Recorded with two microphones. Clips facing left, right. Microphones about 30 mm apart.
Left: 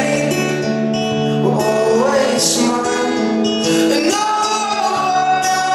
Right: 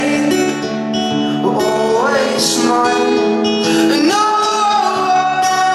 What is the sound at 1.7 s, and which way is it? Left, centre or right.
Music, right.